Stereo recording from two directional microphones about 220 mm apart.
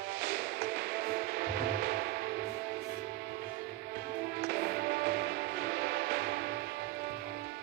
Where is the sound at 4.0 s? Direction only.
45° right (ahead or behind).